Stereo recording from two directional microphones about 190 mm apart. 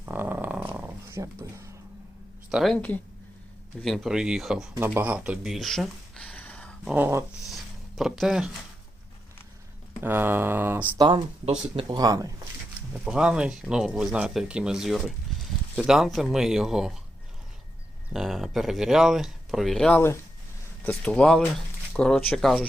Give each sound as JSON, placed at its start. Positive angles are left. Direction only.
{"t": 0.0, "sound": "dog", "side_deg": -10}
{"t": 2.5, "sound": "speech", "side_deg": 0}
{"t": 6.9, "sound": "speech", "side_deg": -10}
{"t": 7.4, "sound": "a sound", "side_deg": 0}
{"t": 10.0, "sound": "speech", "side_deg": -10}
{"t": 10.9, "sound": "speech", "side_deg": -25}
{"t": 13.1, "sound": "speech", "side_deg": -5}
{"t": 18.1, "sound": "speech", "side_deg": 0}